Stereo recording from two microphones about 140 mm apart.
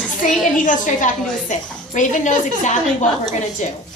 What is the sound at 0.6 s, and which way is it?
A woman's voice, 65° left (ahead or behind).